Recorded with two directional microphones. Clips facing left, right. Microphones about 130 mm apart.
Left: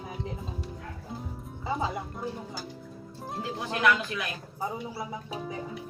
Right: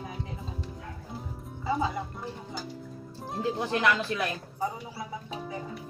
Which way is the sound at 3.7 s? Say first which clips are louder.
Left 3 dB; 30° right (ahead or behind).